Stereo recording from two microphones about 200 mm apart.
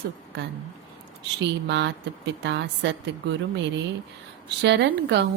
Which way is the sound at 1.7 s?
60° right (ahead or behind).